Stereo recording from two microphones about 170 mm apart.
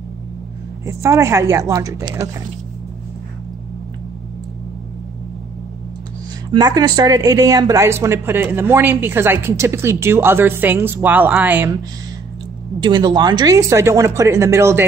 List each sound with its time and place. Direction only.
0.8 s a woman's voice: 15° right (ahead or behind)
6.5 s speech: 25° right (ahead or behind)
12.8 s speech: 25° right (ahead or behind)